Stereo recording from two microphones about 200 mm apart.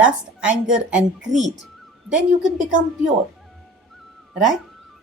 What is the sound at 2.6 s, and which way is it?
Speech, 40° right (ahead or behind).